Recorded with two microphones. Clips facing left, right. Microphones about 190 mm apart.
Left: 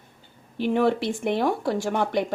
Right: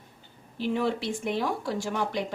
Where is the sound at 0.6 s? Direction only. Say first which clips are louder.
Left 6 dB; 60° left (ahead or behind).